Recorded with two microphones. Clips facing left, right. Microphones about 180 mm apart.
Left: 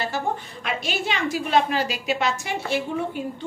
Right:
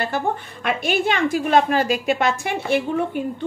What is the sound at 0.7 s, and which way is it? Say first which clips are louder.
A woman's voice: right 6 dB; 55° right (ahead or behind).